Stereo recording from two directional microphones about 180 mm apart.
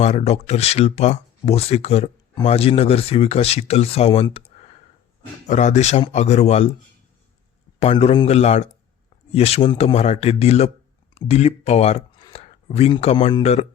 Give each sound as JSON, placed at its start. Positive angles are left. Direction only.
{"t": 0.0, "sound": "speech", "side_deg": 40}
{"t": 7.8, "sound": "speech", "side_deg": 35}